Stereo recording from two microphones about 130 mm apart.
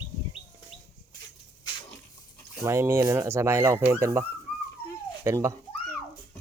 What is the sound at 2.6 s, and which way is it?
Speech, 20° right (ahead or behind).